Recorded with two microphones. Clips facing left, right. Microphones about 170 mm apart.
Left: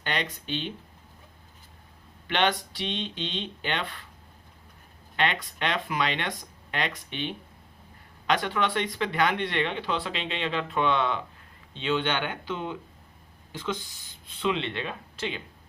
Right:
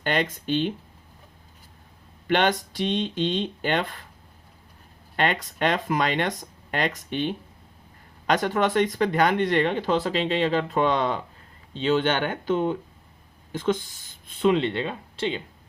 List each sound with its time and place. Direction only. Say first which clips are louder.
0.0 s speech: right 6 dB; 45° right (ahead or behind)
2.2 s speech: right 4 dB; 45° right (ahead or behind)
5.1 s a woman's voice: right 3 dB; 45° right (ahead or behind); by 15.4 s 30° right (ahead or behind)